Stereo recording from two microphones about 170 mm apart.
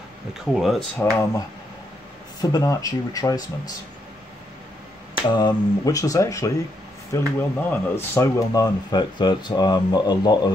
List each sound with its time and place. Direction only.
0.3 s speech: centre (ahead or behind)
2.5 s speech: 20° left (ahead or behind)
5.3 s speech: 25° left (ahead or behind)